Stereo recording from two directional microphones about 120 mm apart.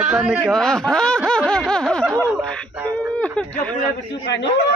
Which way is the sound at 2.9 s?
10° left (ahead or behind).